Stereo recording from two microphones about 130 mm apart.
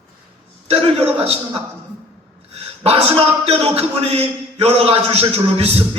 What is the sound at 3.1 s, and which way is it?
A man's voice, 50° right (ahead or behind).